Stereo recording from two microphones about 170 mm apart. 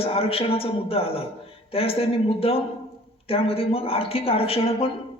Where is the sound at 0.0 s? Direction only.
35° left (ahead or behind).